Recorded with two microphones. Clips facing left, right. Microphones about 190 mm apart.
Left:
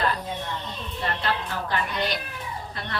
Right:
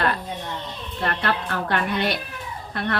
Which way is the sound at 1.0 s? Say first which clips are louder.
Right 3 dB; 60° right (ahead or behind).